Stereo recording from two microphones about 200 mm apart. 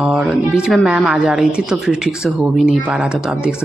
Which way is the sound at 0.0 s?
Centre (ahead or behind).